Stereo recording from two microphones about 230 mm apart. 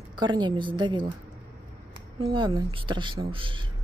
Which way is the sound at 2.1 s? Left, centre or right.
Right.